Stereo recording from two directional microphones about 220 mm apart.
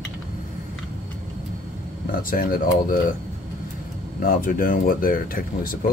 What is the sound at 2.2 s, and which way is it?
Speech, 40° left (ahead or behind).